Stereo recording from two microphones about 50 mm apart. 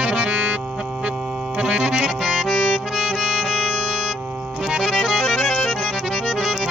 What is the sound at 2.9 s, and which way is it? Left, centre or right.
Music, centre.